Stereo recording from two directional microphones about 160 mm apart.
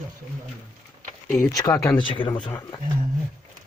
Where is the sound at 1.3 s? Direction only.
20° left (ahead or behind).